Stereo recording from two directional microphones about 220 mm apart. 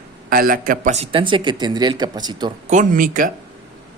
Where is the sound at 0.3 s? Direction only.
40° right (ahead or behind); by 2.5 s 20° right (ahead or behind).